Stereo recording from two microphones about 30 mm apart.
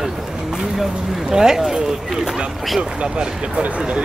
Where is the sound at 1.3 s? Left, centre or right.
Right.